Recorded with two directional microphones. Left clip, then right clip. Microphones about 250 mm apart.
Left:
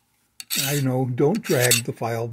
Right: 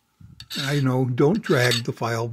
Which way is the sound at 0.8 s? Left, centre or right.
Centre.